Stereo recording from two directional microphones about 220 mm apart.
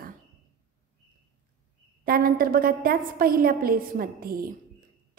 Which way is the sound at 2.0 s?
40° right (ahead or behind).